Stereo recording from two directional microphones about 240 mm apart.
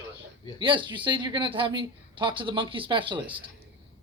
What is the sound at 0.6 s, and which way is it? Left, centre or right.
Speech, right.